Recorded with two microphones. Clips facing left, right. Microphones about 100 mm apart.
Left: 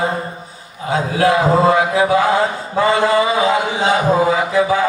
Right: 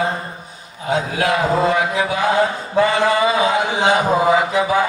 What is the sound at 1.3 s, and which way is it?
Mantra, 25° left (ahead or behind).